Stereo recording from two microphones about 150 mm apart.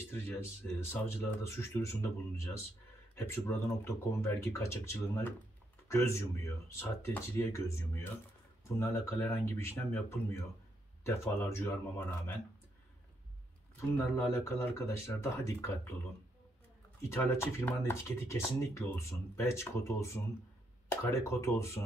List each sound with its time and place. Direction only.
0.1 s speech: 15° left (ahead or behind)
3.2 s speech: 15° left (ahead or behind)
13.7 s speech: 20° left (ahead or behind)
17.1 s speech: 15° left (ahead or behind)